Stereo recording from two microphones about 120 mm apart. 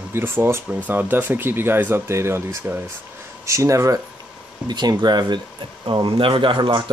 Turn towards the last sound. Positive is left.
turn(degrees=-40)  # may be behind; listen again after turning